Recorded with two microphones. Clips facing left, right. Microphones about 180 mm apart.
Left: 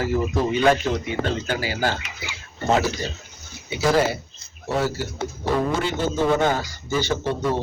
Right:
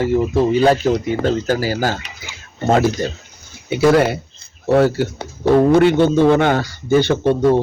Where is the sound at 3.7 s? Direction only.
60° right (ahead or behind).